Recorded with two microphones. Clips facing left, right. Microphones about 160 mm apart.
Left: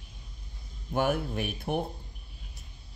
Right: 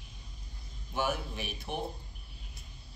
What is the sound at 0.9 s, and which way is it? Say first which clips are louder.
Speech: left 6 dB; 55° left (ahead or behind).